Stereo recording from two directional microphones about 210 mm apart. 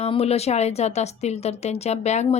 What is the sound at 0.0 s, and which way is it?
Speech, 30° left (ahead or behind).